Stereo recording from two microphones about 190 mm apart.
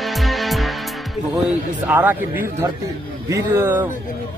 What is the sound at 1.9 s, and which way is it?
Speech, 10° right (ahead or behind).